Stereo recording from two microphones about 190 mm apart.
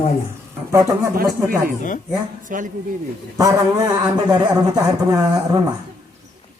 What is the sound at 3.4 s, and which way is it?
A man's voice, 15° right (ahead or behind).